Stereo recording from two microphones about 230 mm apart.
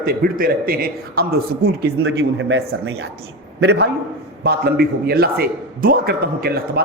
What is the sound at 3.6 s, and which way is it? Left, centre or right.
A man's voice, right.